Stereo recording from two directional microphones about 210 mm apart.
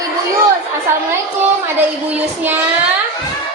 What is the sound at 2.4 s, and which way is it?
Speech, 10° right (ahead or behind).